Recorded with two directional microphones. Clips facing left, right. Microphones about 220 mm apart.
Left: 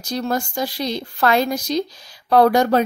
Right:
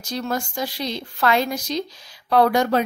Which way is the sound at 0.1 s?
40° left (ahead or behind).